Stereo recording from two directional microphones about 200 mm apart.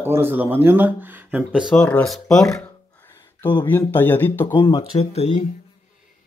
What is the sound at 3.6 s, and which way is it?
Speech, 10° left (ahead or behind).